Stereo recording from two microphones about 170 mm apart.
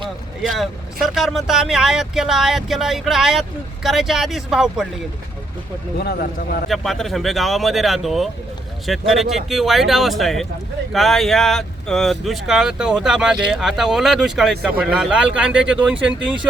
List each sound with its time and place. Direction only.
0.4 s speech: centre (ahead or behind)
6.0 s speech: 65° left (ahead or behind)
6.7 s speech: centre (ahead or behind)